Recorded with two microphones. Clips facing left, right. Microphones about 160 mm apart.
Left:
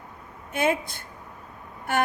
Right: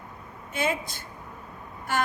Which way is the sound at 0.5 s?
55° left (ahead or behind).